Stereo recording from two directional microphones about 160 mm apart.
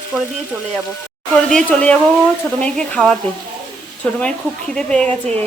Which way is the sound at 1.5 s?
5° left (ahead or behind).